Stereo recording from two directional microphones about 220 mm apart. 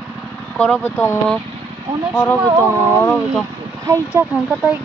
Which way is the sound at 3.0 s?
Centre (ahead or behind).